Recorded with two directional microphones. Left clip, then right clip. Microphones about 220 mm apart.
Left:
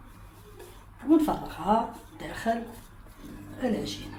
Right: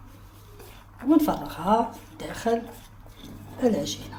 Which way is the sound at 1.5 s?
45° right (ahead or behind).